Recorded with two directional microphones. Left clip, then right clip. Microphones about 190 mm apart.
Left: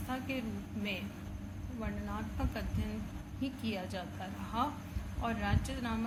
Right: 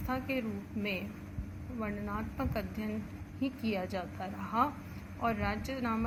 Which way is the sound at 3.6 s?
40° right (ahead or behind).